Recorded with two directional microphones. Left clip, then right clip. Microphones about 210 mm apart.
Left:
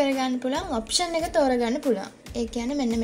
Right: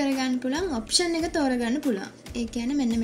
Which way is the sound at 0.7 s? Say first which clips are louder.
Right 2 dB; 20° left (ahead or behind).